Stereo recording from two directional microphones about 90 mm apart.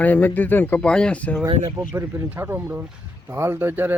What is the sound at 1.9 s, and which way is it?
Speech, 25° right (ahead or behind).